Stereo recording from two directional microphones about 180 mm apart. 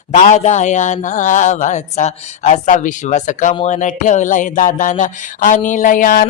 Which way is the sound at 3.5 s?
40° left (ahead or behind).